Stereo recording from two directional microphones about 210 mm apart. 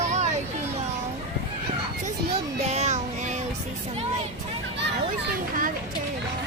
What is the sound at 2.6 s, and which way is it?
Child singing, 30° right (ahead or behind).